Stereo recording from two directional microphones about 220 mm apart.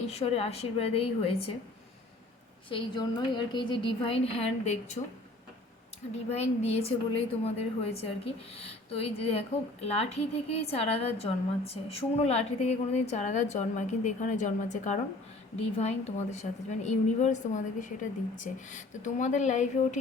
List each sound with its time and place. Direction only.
0.1 s a woman's voice: 30° left (ahead or behind)
2.6 s a woman's voice: 20° left (ahead or behind)
6.3 s a woman's voice: 30° left (ahead or behind)